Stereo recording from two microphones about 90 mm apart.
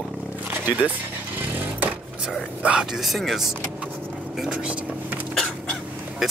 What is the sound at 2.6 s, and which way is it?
Speech, 10° right (ahead or behind).